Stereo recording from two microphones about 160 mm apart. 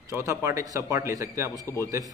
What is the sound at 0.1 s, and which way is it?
Speech, 20° right (ahead or behind).